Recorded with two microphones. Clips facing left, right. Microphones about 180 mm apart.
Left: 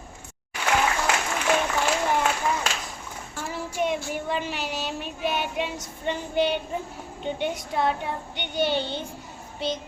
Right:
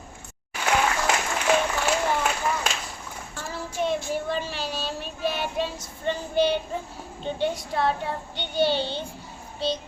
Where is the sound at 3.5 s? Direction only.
15° left (ahead or behind).